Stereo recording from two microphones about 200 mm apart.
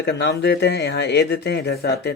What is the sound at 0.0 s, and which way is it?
Speech, 60° left (ahead or behind).